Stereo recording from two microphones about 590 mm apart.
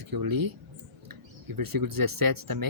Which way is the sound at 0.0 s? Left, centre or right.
Right.